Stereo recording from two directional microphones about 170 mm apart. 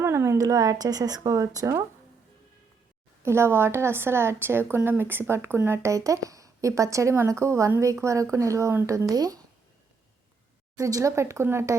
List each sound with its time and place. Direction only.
0.0 s speech: 15° right (ahead or behind)
3.2 s a woman's voice: 15° right (ahead or behind)
10.8 s a woman's voice: 20° right (ahead or behind)